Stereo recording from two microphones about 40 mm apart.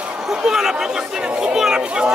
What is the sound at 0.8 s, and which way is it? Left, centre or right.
Chatter, centre.